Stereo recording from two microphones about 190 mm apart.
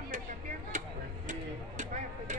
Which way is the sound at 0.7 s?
40° right (ahead or behind).